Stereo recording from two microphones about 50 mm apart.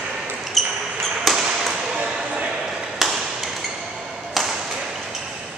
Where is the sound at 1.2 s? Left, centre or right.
Centre.